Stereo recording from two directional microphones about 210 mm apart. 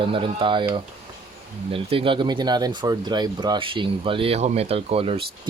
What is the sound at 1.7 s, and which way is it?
Speech, 25° right (ahead or behind).